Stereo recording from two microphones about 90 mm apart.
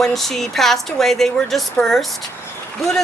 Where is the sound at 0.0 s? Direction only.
5° left (ahead or behind).